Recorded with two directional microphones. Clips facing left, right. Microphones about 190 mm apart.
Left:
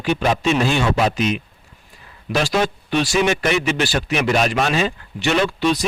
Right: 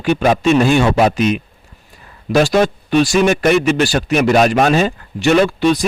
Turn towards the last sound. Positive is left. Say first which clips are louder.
# right 6 dB
turn(degrees=-50)  # may be behind; listen again after turning